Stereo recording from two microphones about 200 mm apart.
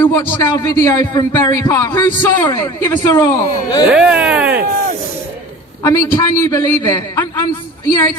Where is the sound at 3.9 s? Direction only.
5° right (ahead or behind).